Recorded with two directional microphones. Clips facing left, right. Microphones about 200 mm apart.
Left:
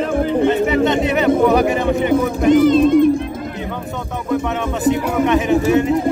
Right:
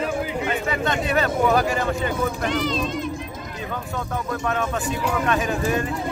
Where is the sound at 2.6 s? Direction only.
55° left (ahead or behind).